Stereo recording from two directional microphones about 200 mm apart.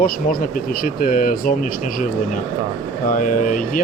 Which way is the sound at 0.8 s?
45° left (ahead or behind).